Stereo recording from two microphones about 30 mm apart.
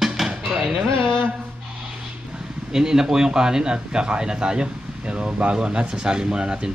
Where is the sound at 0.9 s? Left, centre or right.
Left.